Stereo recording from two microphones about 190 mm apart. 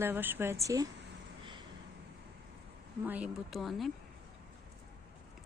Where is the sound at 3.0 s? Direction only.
5° right (ahead or behind).